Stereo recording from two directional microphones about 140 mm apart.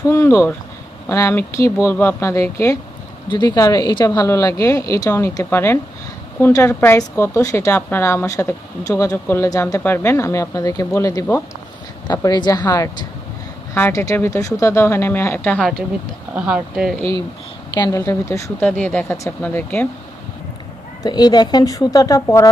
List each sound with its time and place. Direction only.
0.0 s a woman's voice: 20° left (ahead or behind)
3.2 s a woman's voice: 35° left (ahead or behind); by 15.7 s 10° left (ahead or behind)
16.3 s speech: 5° right (ahead or behind)
17.7 s a woman's voice: 25° left (ahead or behind)
18.8 s speech: 10° left (ahead or behind)
19.0 s a woman's voice: 20° left (ahead or behind)
19.4 s speech: 10° left (ahead or behind)
21.0 s a woman's voice: 30° left (ahead or behind)